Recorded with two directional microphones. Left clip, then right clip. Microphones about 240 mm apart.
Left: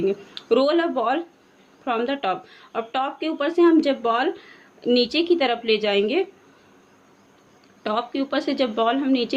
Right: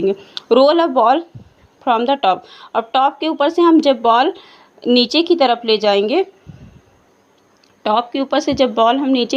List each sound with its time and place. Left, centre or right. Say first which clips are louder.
0.0 s speech: right 6 dB; right
7.8 s speech: right 8 dB; right